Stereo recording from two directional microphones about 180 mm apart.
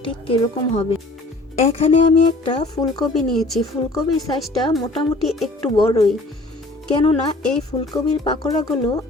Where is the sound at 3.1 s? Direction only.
Centre (ahead or behind).